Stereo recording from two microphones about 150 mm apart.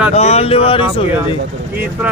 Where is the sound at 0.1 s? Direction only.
45° left (ahead or behind).